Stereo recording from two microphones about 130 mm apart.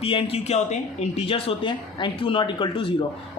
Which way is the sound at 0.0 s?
45° left (ahead or behind).